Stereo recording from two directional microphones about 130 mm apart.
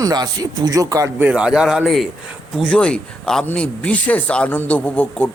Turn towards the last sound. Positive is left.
turn(degrees=10)  # may be behind; listen again after turning